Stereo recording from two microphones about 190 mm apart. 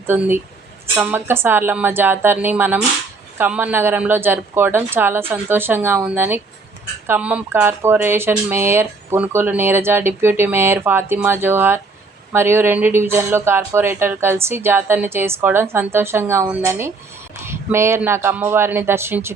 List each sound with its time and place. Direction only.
0.1 s speech: 10° right (ahead or behind)